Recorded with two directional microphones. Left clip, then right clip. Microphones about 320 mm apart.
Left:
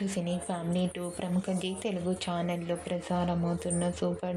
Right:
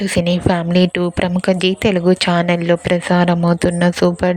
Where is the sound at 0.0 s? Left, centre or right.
Right.